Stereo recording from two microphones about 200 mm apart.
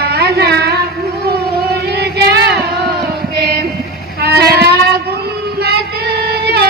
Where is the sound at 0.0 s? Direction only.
50° right (ahead or behind).